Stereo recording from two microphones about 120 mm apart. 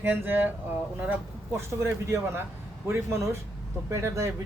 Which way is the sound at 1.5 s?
20° right (ahead or behind).